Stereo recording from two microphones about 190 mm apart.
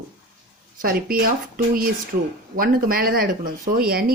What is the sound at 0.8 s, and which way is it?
Speech, 50° right (ahead or behind).